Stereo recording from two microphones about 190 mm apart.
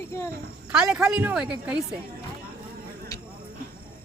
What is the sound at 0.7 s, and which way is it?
Speech, 5° right (ahead or behind).